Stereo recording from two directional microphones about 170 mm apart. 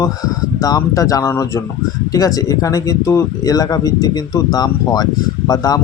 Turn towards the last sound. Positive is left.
turn(degrees=20)  # may be behind; listen again after turning